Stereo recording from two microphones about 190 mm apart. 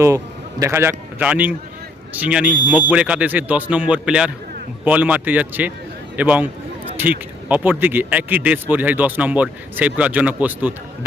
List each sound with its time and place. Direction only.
0.6 s speech: 15° right (ahead or behind)